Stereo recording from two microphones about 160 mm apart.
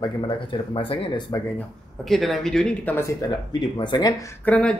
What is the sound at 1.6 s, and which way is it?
Speech, centre (ahead or behind).